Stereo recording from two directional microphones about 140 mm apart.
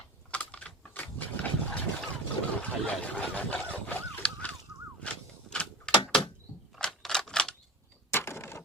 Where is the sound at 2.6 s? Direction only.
10° left (ahead or behind).